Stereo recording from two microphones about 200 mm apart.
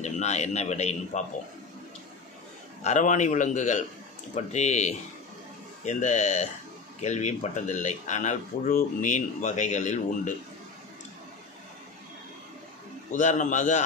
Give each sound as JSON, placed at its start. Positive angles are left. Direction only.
{"t": 0.0, "sound": "speech", "side_deg": 35}
{"t": 2.8, "sound": "speech", "side_deg": 35}
{"t": 13.1, "sound": "speech", "side_deg": 40}